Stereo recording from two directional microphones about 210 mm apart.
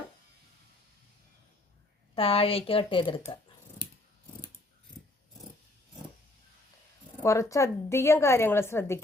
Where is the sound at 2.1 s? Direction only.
25° left (ahead or behind).